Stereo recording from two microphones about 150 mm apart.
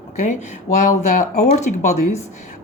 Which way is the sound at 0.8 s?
60° left (ahead or behind).